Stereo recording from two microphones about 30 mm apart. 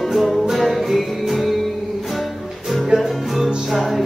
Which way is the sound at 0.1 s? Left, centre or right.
Centre.